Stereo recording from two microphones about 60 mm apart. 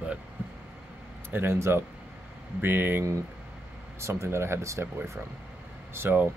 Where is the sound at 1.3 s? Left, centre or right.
Right.